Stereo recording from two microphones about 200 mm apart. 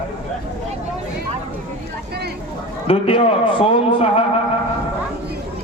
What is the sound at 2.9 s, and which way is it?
A man's voice, 25° left (ahead or behind).